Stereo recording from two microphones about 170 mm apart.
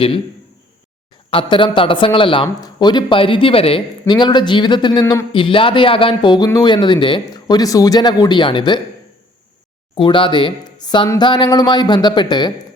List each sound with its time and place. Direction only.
1.3 s speech: 30° left (ahead or behind)
9.9 s speech: 30° left (ahead or behind)